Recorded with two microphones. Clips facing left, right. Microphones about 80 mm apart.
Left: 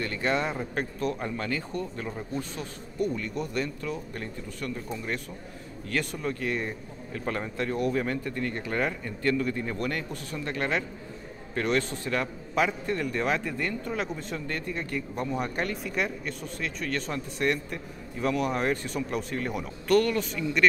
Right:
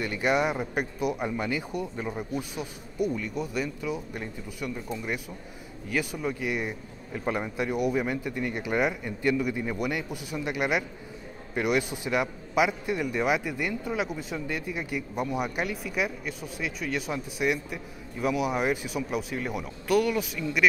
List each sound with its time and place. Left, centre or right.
0.0 s a man's voice: centre